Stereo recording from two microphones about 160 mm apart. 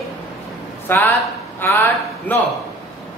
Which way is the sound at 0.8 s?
15° left (ahead or behind).